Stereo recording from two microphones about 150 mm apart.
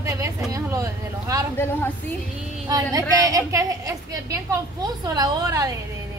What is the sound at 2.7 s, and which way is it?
A woman's voice, 25° right (ahead or behind).